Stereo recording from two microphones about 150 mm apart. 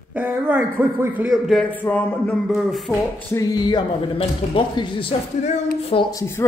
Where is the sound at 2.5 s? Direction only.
Centre (ahead or behind).